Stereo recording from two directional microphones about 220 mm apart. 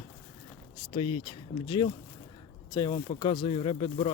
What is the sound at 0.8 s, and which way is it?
Speech, 20° left (ahead or behind).